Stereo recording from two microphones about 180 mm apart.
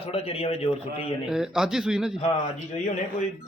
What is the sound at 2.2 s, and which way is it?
Speech, 35° left (ahead or behind).